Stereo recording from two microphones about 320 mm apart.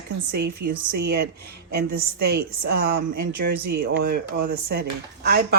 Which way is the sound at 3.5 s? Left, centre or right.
Right.